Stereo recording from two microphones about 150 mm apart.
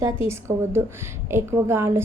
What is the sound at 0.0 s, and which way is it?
A woman's voice, 15° right (ahead or behind).